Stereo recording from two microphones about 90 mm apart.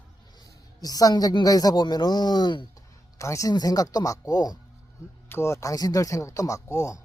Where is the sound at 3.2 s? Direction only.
35° left (ahead or behind).